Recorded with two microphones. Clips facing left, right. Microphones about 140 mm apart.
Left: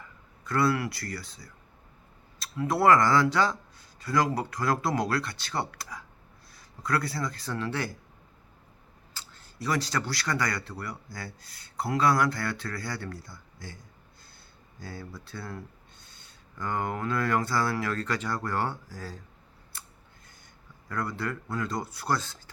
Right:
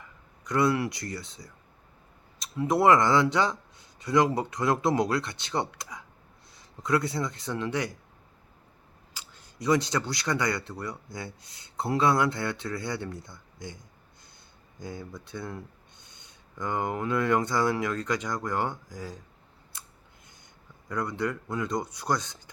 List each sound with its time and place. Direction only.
0.4 s speech: 20° right (ahead or behind)
9.1 s speech: 15° right (ahead or behind)
14.8 s speech: 20° right (ahead or behind)
20.9 s speech: 20° right (ahead or behind)